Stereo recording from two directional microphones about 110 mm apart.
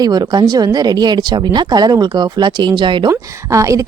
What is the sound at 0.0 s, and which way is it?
Speech, 40° right (ahead or behind).